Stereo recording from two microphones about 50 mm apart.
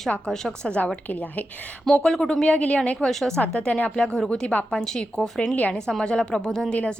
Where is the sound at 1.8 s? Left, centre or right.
Centre.